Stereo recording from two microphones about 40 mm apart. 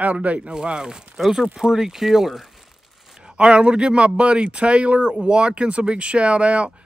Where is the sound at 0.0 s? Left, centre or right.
Right.